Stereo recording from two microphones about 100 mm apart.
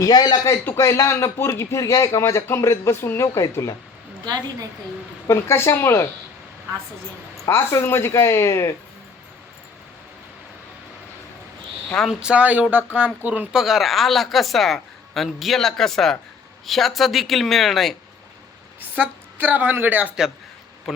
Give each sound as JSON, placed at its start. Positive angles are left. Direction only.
{"t": 0.0, "sound": "speech", "side_deg": 40}
{"t": 0.6, "sound": "speech", "side_deg": 25}
{"t": 5.3, "sound": "speech", "side_deg": 25}
{"t": 7.4, "sound": "speech", "side_deg": 30}
{"t": 12.0, "sound": "speech", "side_deg": -10}
{"t": 13.5, "sound": "speech", "side_deg": -5}
{"t": 18.8, "sound": "speech", "side_deg": -20}